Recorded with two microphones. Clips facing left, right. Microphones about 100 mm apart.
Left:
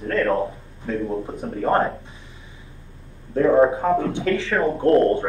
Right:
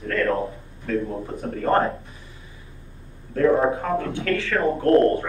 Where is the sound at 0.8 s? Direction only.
20° left (ahead or behind).